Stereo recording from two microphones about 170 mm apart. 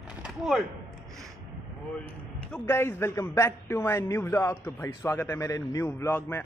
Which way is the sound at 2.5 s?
15° left (ahead or behind).